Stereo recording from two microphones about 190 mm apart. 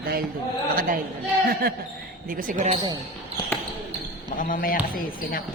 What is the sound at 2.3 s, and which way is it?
Speech, 45° right (ahead or behind).